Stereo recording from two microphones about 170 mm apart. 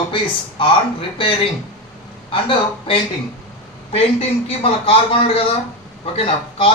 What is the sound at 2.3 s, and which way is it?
Speech, 30° left (ahead or behind).